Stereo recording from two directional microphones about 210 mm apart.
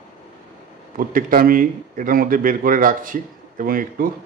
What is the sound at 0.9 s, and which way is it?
A man's voice, 40° right (ahead or behind).